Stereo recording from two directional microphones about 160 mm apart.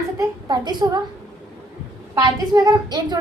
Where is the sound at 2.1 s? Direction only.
25° right (ahead or behind).